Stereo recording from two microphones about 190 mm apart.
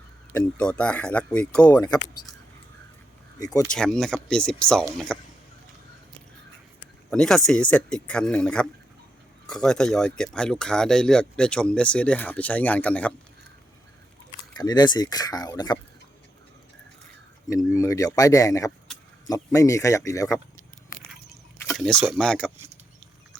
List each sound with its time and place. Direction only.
0.3 s speech: 10° left (ahead or behind)
3.4 s speech: 15° left (ahead or behind)
3.7 s speech: 5° left (ahead or behind)
7.1 s speech: 5° left (ahead or behind)
14.5 s speech: 20° left (ahead or behind)
17.7 s speech: 15° left (ahead or behind)
21.8 s speech: 5° left (ahead or behind)